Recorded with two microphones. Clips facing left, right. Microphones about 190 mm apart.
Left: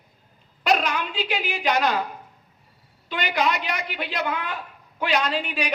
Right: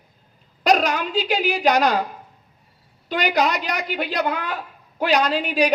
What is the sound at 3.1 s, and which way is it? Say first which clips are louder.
A woman's voice: right 4 dB; 40° right (ahead or behind).